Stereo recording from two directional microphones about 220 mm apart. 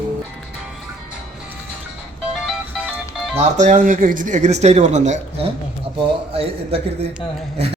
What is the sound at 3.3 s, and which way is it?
A man's voice, 30° right (ahead or behind).